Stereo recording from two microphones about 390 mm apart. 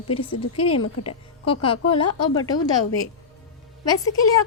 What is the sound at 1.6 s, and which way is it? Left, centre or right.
Speech, centre.